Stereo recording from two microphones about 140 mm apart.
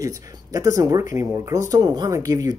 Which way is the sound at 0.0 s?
25° right (ahead or behind).